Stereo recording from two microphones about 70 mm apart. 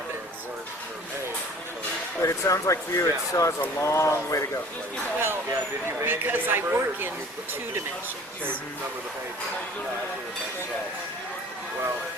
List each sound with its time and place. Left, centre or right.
2.2 s speech: left
5.2 s a woman's voice: right